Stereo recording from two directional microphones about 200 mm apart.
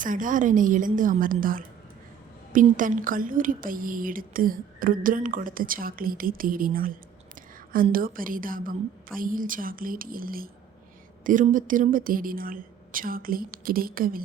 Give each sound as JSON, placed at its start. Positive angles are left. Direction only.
{"t": 0.0, "sound": "a woman's voice", "side_deg": -40}